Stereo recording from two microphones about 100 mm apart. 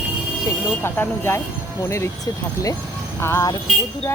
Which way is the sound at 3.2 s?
25° left (ahead or behind).